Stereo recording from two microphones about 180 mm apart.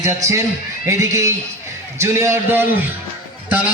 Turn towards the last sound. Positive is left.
turn(degrees=-10)  # may be behind; listen again after turning